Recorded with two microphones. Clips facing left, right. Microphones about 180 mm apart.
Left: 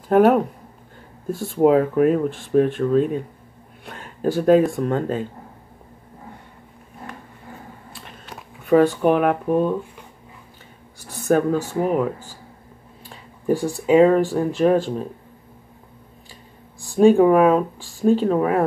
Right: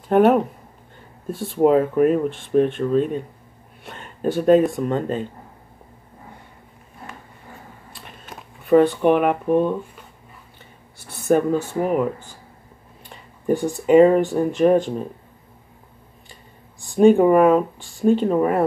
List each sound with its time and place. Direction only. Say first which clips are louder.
0.1 s speech: even; centre (ahead or behind)
8.4 s speech: right 1 dB; centre (ahead or behind)
11.2 s speech: even; 5° right (ahead or behind)
13.8 s speech: right 1 dB; centre (ahead or behind)
17.0 s speech: even; centre (ahead or behind)
17.7 s a sound: left 2 dB; 35° left (ahead or behind)
18.0 s speech: even; centre (ahead or behind)